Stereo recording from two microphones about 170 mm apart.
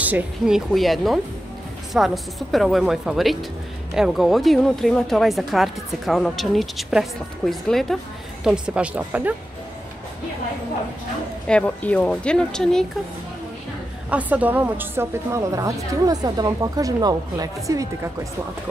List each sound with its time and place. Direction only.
0.0 s a woman's voice: 5° right (ahead or behind)
11.4 s speech: 5° left (ahead or behind)
14.1 s a woman's voice: 10° right (ahead or behind)